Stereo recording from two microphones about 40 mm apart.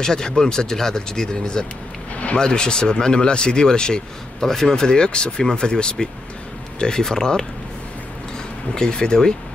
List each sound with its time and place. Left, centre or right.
0.0 s speech: centre
8.7 s speech: centre